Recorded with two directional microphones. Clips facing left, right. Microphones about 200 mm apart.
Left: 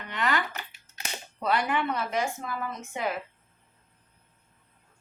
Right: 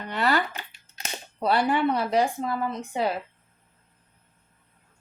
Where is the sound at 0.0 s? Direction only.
35° right (ahead or behind).